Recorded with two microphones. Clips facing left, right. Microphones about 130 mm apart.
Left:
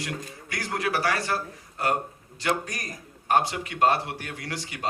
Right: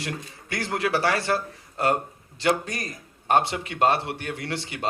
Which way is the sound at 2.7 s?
25° right (ahead or behind).